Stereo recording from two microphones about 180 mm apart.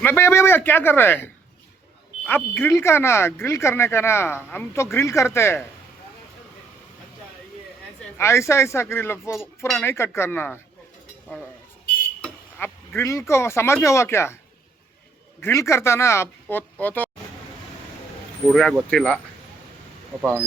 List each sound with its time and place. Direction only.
0.0 s speech: 15° left (ahead or behind)
8.2 s speech: 15° left (ahead or behind)
12.2 s speech: 10° left (ahead or behind)
15.4 s speech: 15° left (ahead or behind)
18.9 s speech: 5° left (ahead or behind)